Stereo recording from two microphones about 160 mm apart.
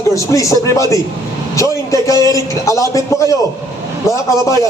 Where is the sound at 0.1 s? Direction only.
20° left (ahead or behind).